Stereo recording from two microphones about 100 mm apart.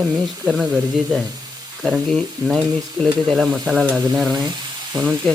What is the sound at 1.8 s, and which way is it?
Stir, centre (ahead or behind).